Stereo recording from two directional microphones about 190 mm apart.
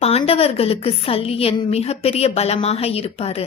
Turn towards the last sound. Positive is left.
turn(degrees=30)  # may be behind; listen again after turning